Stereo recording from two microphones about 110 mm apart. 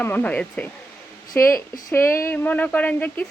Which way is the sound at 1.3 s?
25° left (ahead or behind).